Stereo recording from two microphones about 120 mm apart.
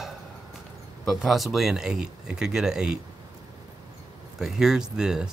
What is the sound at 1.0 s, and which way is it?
Speech, centre (ahead or behind).